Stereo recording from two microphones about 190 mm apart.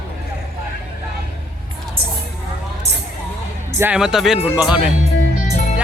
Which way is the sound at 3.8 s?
5° right (ahead or behind).